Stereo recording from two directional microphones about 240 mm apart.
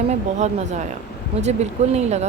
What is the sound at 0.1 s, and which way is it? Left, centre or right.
Speech, right.